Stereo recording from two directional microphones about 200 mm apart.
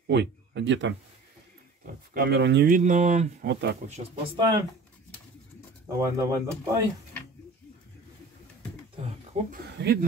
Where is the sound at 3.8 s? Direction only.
35° right (ahead or behind).